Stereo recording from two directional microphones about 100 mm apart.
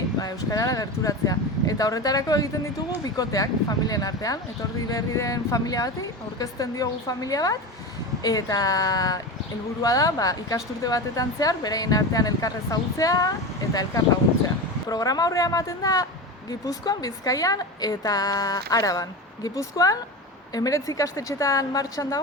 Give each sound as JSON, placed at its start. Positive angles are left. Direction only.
{"t": 0.2, "sound": "a woman's voice", "side_deg": 40}
{"t": 14.8, "sound": "a woman's voice", "side_deg": 40}